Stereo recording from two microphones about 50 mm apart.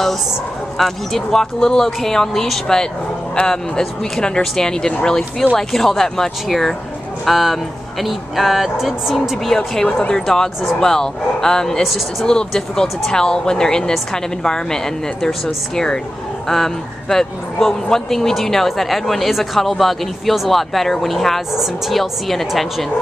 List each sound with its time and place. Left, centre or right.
0.7 s speech: centre
3.3 s speech: centre
7.2 s speech: centre
9.5 s speech: centre